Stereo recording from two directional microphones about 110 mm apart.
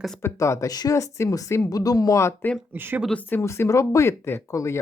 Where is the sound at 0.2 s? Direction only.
25° left (ahead or behind).